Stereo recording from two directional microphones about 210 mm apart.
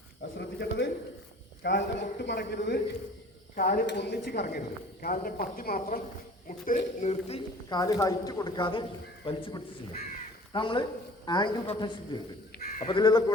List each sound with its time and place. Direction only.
0.3 s a sound: 55° left (ahead or behind)
1.6 s speech: 55° left (ahead or behind)
6.7 s speech: 30° left (ahead or behind)
7.8 s speech: 15° left (ahead or behind)
12.5 s crow: 35° left (ahead or behind)
13.0 s speech: 20° left (ahead or behind)